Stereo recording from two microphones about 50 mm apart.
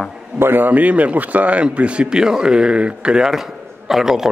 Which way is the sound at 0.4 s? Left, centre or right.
Right.